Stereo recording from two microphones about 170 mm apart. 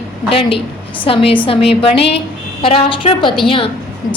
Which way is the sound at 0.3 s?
30° left (ahead or behind).